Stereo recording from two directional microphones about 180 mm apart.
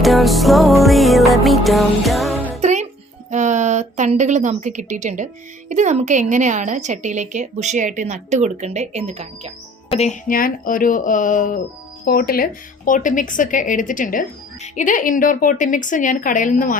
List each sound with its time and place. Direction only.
0.0 s music: centre (ahead or behind)
2.6 s music: 40° right (ahead or behind)
3.2 s a woman's voice: 40° right (ahead or behind)
9.9 s speech: 40° left (ahead or behind)
12.0 s speech: 55° left (ahead or behind)